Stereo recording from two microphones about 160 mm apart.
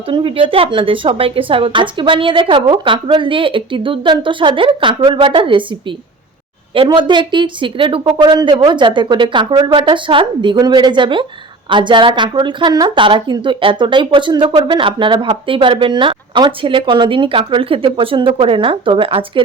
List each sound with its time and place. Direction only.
0.1 s speech: 30° right (ahead or behind)
6.7 s speech: 30° right (ahead or behind)